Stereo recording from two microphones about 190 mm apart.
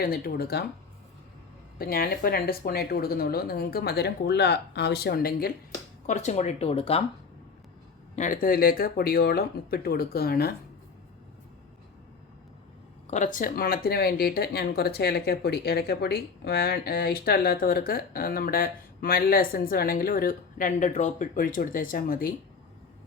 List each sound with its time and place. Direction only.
0.0 s speech: 55° left (ahead or behind)
1.8 s speech: 50° left (ahead or behind)
6.1 s speech: 40° left (ahead or behind)
8.1 s speech: 45° left (ahead or behind)
13.1 s speech: 40° left (ahead or behind)